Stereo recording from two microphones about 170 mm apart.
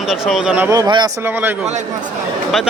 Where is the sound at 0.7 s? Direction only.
25° right (ahead or behind).